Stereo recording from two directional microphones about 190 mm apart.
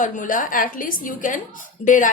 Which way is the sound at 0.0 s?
45° left (ahead or behind).